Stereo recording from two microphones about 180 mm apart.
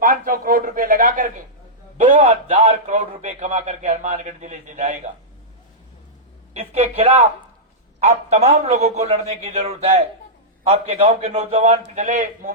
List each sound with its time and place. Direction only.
0.0 s a man's voice: 50° right (ahead or behind)
6.5 s a man's voice: 35° right (ahead or behind)